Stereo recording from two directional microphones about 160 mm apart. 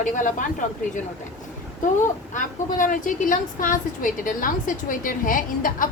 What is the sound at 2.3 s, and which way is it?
A woman's voice, 55° left (ahead or behind).